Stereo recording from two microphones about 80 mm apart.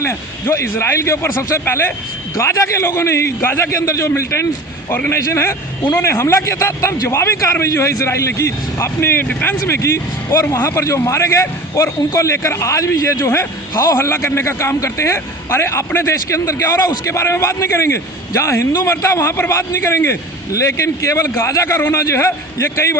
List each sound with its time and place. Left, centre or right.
0.0 s a man's voice: left